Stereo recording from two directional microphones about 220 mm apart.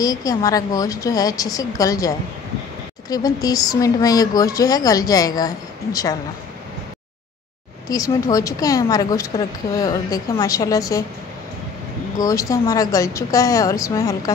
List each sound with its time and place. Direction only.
0.0 s a woman's voice: 15° left (ahead or behind)
7.9 s a woman's voice: 15° left (ahead or behind)
12.2 s a woman's voice: 15° left (ahead or behind)